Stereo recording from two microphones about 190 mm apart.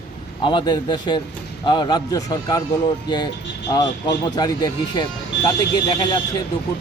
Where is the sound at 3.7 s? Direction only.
20° left (ahead or behind).